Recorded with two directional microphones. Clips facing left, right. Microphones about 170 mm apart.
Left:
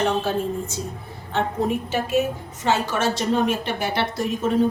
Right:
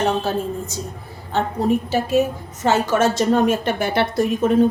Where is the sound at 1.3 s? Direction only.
35° right (ahead or behind).